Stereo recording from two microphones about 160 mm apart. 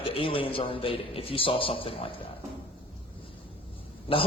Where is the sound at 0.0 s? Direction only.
35° left (ahead or behind).